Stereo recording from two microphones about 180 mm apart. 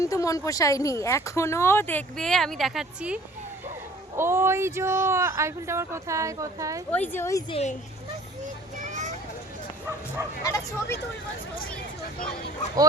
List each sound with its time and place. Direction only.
0.0 s speech: 20° left (ahead or behind); by 3.2 s 5° right (ahead or behind)
4.2 s speech: 15° right (ahead or behind)
6.9 s speech: 10° left (ahead or behind)
7.5 s speech: 40° left (ahead or behind)
8.8 s a sound: 45° right (ahead or behind)
10.4 s speech: 20° left (ahead or behind)